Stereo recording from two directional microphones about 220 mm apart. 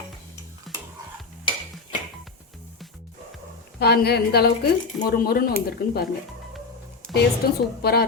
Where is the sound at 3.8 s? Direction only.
45° left (ahead or behind).